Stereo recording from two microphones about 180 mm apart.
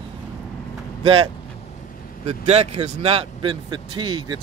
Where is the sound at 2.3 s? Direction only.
35° right (ahead or behind).